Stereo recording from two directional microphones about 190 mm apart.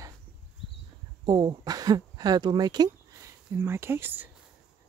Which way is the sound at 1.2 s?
20° right (ahead or behind).